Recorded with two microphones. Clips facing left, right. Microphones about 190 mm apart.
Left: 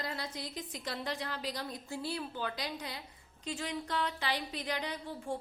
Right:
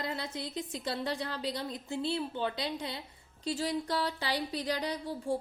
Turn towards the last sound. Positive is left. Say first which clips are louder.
# right 5 dB
turn(degrees=-35)  # may be behind; listen again after turning